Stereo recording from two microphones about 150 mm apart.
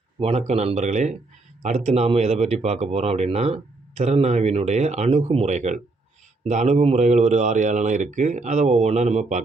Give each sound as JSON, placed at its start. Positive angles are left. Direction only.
{"t": 0.2, "sound": "speech", "side_deg": -45}